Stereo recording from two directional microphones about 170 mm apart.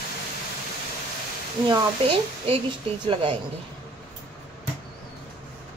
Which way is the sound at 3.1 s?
30° right (ahead or behind).